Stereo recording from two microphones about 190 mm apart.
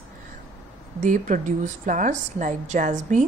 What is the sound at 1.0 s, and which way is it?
A woman's voice, 40° right (ahead or behind).